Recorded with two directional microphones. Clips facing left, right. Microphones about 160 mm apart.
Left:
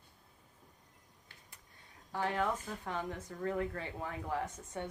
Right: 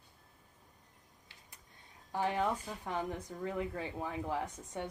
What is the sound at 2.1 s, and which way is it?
Speech, 15° right (ahead or behind).